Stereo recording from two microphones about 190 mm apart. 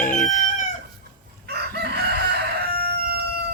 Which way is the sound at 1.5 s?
55° right (ahead or behind).